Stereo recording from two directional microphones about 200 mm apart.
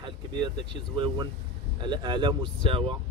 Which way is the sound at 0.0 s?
25° right (ahead or behind).